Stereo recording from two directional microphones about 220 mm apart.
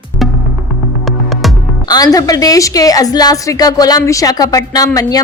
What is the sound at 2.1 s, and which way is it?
Speech, 15° left (ahead or behind).